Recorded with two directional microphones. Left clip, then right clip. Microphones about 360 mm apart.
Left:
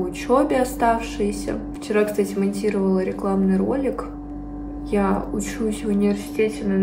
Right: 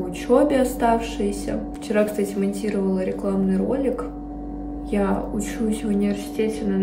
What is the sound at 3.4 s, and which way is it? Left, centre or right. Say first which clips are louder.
A woman's voice: right 1 dB; centre.